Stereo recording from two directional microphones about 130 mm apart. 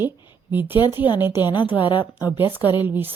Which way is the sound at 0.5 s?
15° right (ahead or behind).